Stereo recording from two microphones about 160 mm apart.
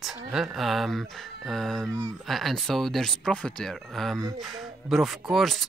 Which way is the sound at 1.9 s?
20° right (ahead or behind).